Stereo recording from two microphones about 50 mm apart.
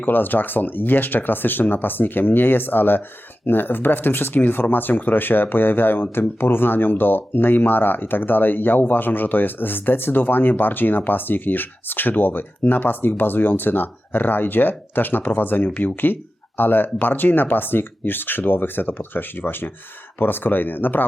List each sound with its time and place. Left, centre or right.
0.0 s speech: left